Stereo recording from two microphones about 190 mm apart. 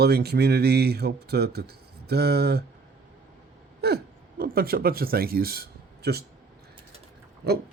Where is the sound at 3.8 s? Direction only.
55° right (ahead or behind).